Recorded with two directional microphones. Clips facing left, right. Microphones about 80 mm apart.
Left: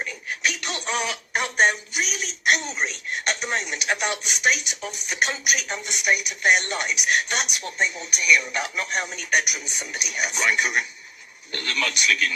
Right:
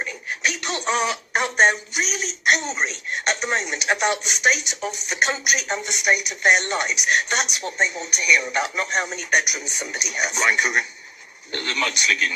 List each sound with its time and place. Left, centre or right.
0.0 s speech: right